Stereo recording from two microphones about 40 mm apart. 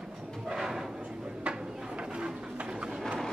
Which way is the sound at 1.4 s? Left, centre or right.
Right.